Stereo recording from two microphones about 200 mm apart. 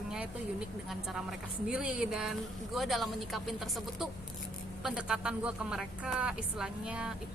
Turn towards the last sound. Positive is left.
turn(degrees=-5)  # may be behind; listen again after turning